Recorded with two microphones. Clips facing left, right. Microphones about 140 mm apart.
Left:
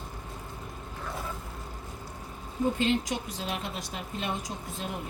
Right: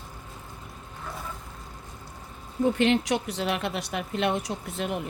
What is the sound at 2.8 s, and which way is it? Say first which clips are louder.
A woman's voice: right 5 dB; 70° right (ahead or behind).